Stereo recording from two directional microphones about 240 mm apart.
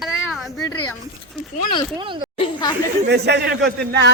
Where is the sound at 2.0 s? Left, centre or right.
Right.